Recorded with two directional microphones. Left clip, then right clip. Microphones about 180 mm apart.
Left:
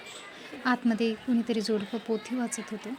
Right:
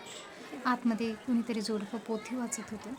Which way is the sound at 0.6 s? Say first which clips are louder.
Left 4 dB; 15° left (ahead or behind).